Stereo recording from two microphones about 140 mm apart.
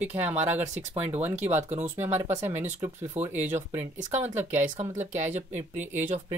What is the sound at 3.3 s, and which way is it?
Speech, 55° right (ahead or behind).